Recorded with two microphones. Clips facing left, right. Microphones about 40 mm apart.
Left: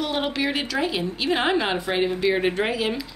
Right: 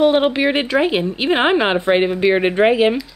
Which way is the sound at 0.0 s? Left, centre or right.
Right.